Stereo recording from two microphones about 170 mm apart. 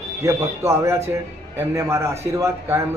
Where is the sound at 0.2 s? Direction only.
20° right (ahead or behind).